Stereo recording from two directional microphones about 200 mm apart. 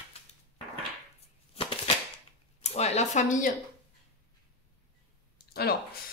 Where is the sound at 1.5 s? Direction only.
25° left (ahead or behind).